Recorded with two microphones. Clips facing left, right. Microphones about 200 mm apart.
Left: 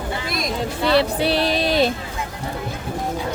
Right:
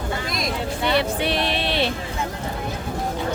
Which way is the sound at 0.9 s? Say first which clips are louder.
Left 5 dB; 35° left (ahead or behind).